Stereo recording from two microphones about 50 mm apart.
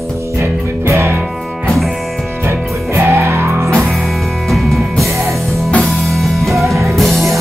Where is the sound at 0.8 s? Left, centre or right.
Right.